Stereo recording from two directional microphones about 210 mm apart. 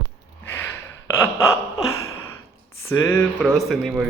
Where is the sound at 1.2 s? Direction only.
15° left (ahead or behind).